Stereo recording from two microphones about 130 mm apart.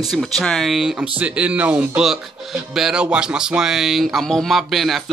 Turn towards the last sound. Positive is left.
turn(degrees=0)  # may be behind; listen again after turning